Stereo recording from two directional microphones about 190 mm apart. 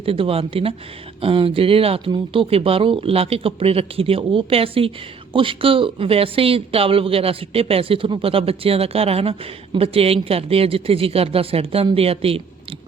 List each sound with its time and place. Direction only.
0.0 s speech: 30° right (ahead or behind)